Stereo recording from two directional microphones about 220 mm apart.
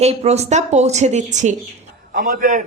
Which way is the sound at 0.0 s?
30° right (ahead or behind).